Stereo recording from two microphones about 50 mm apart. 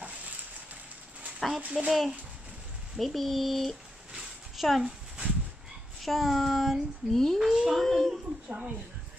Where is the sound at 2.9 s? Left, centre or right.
Centre.